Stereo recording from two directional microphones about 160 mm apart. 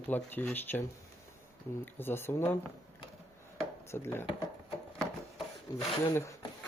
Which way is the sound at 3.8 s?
15° left (ahead or behind).